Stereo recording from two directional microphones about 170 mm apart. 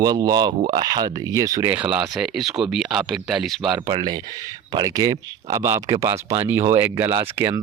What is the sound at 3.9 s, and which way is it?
Speech, 25° right (ahead or behind).